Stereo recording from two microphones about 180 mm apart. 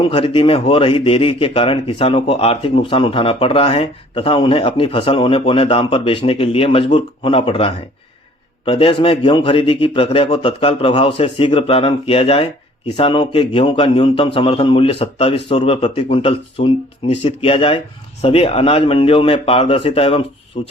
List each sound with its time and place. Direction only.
0.1 s a man's voice: 30° left (ahead or behind)